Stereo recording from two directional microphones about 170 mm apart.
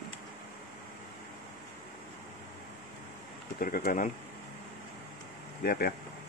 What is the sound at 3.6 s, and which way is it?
Speech, 60° left (ahead or behind).